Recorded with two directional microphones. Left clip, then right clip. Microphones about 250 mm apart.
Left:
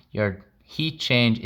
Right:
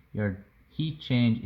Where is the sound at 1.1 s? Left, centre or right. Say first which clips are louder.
Left 8 dB; left.